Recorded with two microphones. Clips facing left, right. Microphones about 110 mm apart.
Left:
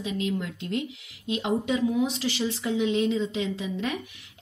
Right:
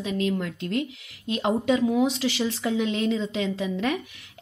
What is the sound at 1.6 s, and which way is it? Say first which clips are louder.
Speech: right 6 dB; 85° right.